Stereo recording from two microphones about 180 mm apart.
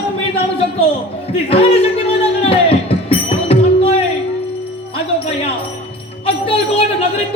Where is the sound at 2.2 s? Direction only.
30° left (ahead or behind).